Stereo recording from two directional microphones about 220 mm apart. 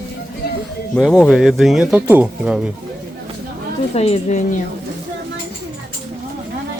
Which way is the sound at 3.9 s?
30° left (ahead or behind).